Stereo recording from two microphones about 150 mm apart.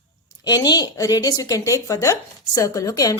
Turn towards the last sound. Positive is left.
turn(degrees=25)  # may be behind; listen again after turning